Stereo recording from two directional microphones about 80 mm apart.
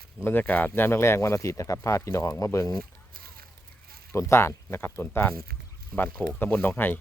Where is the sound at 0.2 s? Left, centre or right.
Left.